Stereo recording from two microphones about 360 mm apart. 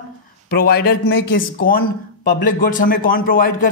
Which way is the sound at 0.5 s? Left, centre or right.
Left.